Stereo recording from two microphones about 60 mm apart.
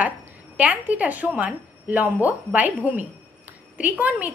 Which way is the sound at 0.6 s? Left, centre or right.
Right.